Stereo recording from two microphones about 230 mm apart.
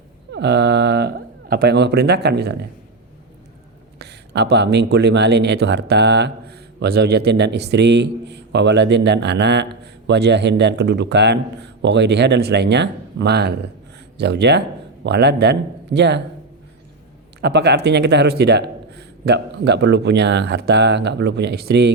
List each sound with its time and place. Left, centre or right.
0.3 s speech: right
3.9 s speech: right
17.4 s speech: right